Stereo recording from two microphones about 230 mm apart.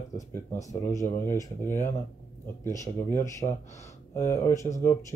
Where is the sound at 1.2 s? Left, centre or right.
Centre.